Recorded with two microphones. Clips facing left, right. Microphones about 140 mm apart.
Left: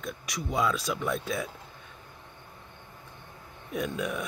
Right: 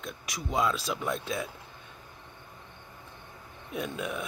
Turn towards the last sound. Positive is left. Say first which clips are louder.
# left 2 dB
turn(degrees=0)  # may be behind; listen again after turning